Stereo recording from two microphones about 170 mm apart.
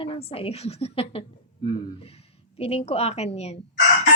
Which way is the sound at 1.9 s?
35° left (ahead or behind).